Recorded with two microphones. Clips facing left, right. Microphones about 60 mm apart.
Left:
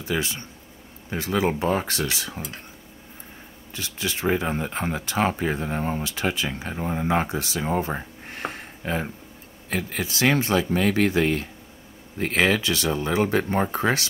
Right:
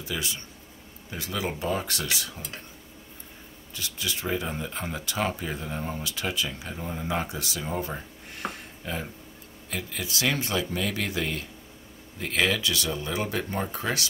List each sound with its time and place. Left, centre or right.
0.0 s speech: left
3.7 s speech: left